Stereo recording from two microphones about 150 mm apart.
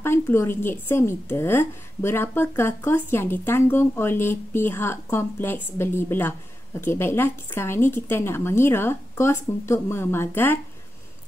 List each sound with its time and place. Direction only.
0.0 s a woman's voice: 15° left (ahead or behind)